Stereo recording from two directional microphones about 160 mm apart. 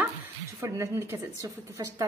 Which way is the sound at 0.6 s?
15° right (ahead or behind).